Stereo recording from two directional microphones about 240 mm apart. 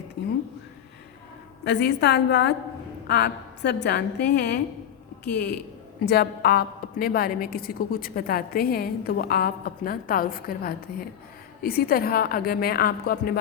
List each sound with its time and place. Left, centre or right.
1.6 s a woman's voice: left
5.2 s speech: centre
6.1 s a woman's voice: left